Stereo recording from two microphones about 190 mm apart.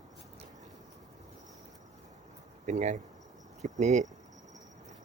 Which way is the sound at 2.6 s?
40° right (ahead or behind).